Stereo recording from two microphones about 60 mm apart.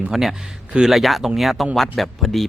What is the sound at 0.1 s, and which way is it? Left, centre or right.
Speech, centre.